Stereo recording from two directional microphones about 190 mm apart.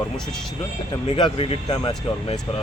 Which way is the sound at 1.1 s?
30° left (ahead or behind).